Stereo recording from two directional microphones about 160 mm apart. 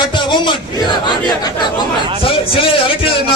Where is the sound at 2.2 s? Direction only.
35° left (ahead or behind).